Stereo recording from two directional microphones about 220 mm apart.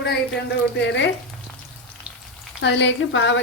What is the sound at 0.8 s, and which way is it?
Speech, 55° left (ahead or behind).